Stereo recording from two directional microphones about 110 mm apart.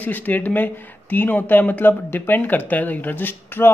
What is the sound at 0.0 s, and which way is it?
Speech, 15° left (ahead or behind).